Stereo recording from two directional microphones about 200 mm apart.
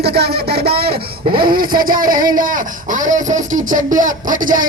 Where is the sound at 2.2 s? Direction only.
40° right (ahead or behind).